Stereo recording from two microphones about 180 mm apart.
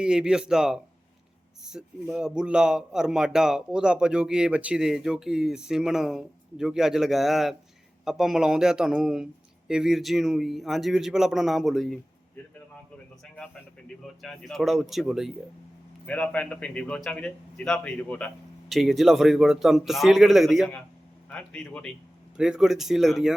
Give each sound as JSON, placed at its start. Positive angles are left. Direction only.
{"t": 0.0, "sound": "a man's voice", "side_deg": -5}
{"t": 13.3, "sound": "a man's voice", "side_deg": 5}